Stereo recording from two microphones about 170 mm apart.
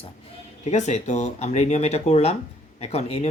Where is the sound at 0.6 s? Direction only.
40° left (ahead or behind).